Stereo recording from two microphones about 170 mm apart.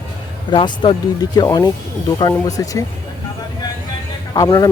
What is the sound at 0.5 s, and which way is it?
Speech, 30° left (ahead or behind).